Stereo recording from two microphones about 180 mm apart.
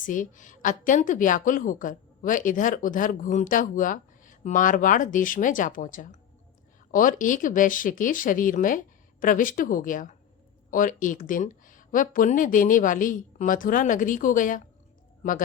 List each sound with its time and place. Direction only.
0.0 s a woman's voice: 45° left (ahead or behind)